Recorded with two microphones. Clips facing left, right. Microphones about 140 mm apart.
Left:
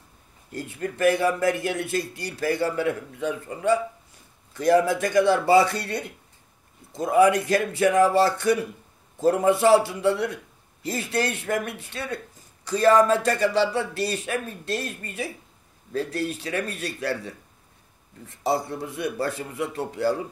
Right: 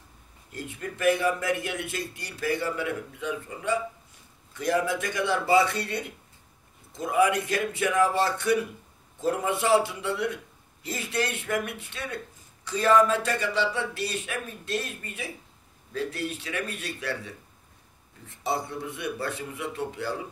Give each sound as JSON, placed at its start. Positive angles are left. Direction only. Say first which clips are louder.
{"t": 0.5, "sound": "a man's voice", "louder": "left 5 dB", "side_deg": 40}
{"t": 18.4, "sound": "a man's voice", "louder": "left 4 dB", "side_deg": 40}